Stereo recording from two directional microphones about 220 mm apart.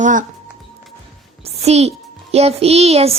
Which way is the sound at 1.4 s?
30° right (ahead or behind).